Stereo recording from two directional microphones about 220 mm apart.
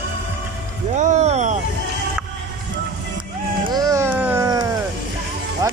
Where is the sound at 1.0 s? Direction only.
30° right (ahead or behind).